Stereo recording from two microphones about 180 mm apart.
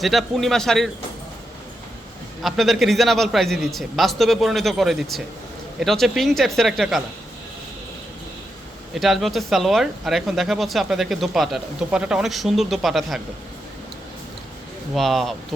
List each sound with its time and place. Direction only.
0.0 s speech: centre (ahead or behind)
2.4 s speech: centre (ahead or behind)
9.0 s speech: centre (ahead or behind)
14.9 s speech: centre (ahead or behind)